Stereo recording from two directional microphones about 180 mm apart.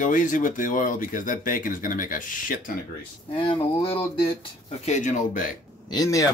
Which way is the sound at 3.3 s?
30° left (ahead or behind).